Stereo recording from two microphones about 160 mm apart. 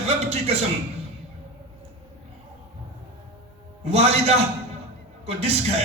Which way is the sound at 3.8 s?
40° right (ahead or behind).